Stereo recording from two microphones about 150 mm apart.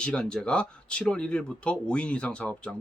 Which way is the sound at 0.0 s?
5° left (ahead or behind).